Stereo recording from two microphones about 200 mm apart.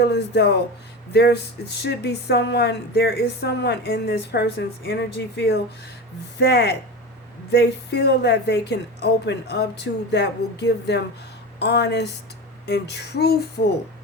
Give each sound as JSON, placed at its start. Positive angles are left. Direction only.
{"t": 0.0, "sound": "speech", "side_deg": 55}